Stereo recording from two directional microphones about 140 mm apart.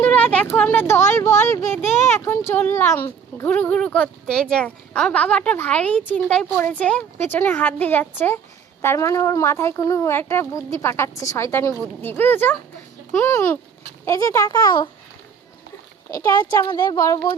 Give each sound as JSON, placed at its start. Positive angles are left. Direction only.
{"t": 0.0, "sound": "speech", "side_deg": 10}
{"t": 16.1, "sound": "speech", "side_deg": 25}